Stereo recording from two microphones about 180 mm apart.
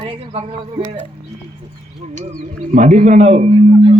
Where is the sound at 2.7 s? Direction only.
40° right (ahead or behind).